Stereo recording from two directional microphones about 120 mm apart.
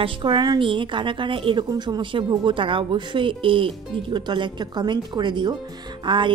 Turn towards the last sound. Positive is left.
turn(degrees=-40)  # may be behind; listen again after turning